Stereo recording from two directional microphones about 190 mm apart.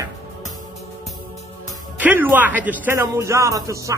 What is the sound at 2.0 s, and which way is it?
A man's voice, 10° right (ahead or behind).